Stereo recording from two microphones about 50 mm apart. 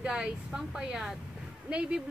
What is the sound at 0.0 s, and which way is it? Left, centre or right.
A woman's voice, centre.